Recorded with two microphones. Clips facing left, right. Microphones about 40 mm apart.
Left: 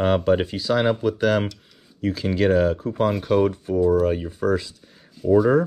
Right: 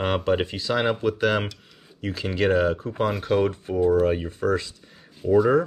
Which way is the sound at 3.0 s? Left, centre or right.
Centre.